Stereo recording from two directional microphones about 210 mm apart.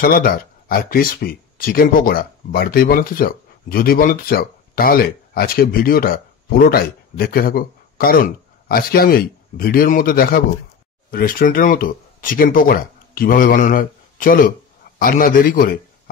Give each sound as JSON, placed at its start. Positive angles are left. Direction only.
{"t": 0.0, "sound": "a man's voice", "side_deg": 45}